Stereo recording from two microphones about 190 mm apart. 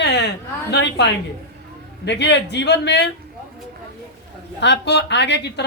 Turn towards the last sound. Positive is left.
turn(degrees=65)  # may be behind; listen again after turning